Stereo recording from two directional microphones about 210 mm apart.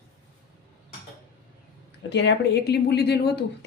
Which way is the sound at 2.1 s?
55° left (ahead or behind).